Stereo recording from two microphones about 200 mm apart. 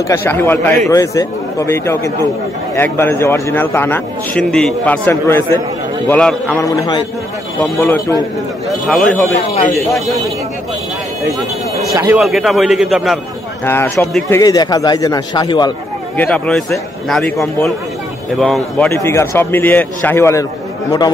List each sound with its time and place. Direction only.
0.1 s a man's voice: 10° left (ahead or behind)
6.6 s a man's voice: 15° left (ahead or behind)
11.9 s a man's voice: 10° right (ahead or behind)
13.7 s a man's voice: 10° left (ahead or behind)
16.2 s a man's voice: 5° left (ahead or behind)
18.3 s a man's voice: centre (ahead or behind)
18.9 s a man's voice: 15° left (ahead or behind)